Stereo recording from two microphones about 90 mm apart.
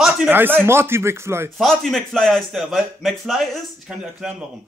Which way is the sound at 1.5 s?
5° left (ahead or behind).